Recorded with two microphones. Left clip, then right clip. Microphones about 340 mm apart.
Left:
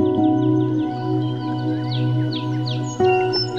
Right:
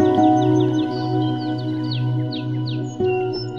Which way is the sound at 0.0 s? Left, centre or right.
Right.